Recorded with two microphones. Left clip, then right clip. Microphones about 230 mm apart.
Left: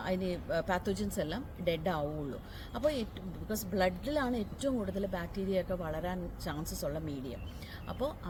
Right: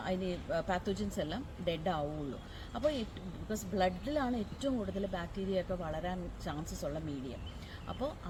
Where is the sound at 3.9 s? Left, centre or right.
Centre.